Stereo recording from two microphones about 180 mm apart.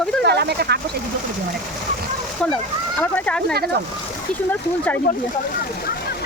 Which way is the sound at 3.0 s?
10° left (ahead or behind).